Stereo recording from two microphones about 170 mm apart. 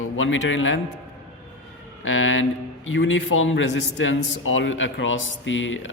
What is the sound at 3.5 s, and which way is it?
A man's voice, 90° left.